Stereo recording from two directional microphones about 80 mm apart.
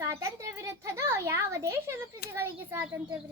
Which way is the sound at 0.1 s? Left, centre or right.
Right.